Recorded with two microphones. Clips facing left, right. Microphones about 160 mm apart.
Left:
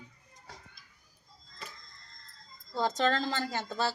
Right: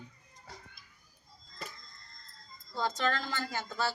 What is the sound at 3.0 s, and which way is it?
Speech, 30° left (ahead or behind).